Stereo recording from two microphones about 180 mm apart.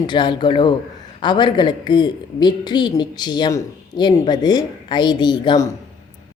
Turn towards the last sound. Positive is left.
turn(degrees=20)  # may be behind; listen again after turning